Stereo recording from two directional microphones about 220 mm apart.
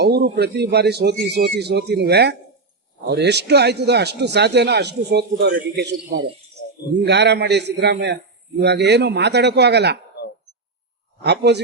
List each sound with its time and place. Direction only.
0.0 s a man's voice: 50° right (ahead or behind)
11.2 s a man's voice: 50° right (ahead or behind)